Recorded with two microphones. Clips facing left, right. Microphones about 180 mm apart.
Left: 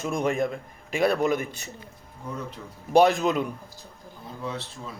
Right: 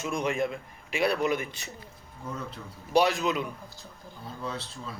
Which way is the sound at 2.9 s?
50° left (ahead or behind).